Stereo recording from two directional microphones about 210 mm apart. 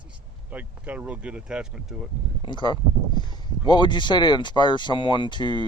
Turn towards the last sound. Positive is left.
turn(degrees=20)  # may be behind; listen again after turning